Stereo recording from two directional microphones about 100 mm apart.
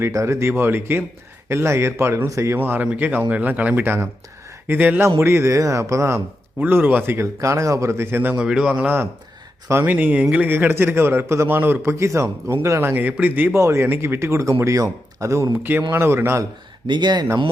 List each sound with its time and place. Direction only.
0.0 s speech: 30° right (ahead or behind)
6.6 s speech: 20° right (ahead or behind)
8.4 s a man's voice: 10° right (ahead or behind); by 16.5 s 25° right (ahead or behind)
16.8 s speech: 50° right (ahead or behind)